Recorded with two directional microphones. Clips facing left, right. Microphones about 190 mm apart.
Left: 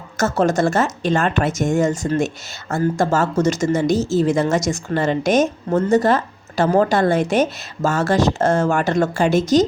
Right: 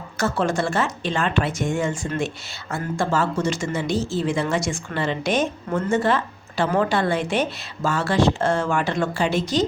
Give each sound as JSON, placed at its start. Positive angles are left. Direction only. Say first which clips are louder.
{"t": 0.2, "sound": "speech", "louder": "left 5 dB", "side_deg": 45}